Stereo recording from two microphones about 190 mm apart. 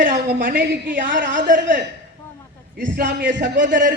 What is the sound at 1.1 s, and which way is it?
Speech, 70° right (ahead or behind).